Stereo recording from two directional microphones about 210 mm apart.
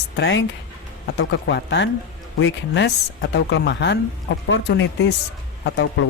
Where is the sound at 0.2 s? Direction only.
60° left (ahead or behind).